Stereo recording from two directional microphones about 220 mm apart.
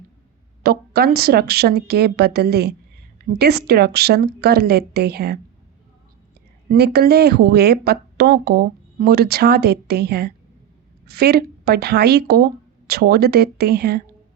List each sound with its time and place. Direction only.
0.6 s speech: 45° right (ahead or behind)
6.7 s speech: 45° right (ahead or behind)